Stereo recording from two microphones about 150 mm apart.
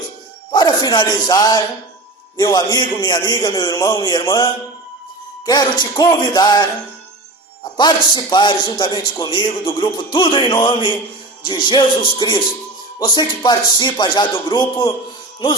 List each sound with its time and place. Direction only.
0.5 s a man's voice: 30° left (ahead or behind)
5.5 s a man's voice: 30° left (ahead or behind)